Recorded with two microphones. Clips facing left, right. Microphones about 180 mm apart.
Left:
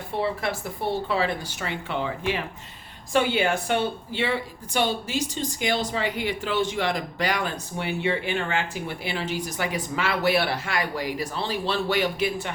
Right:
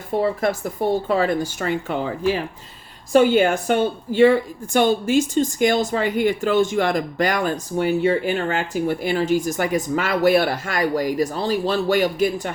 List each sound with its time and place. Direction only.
0.1 s a woman's voice: 45° right (ahead or behind)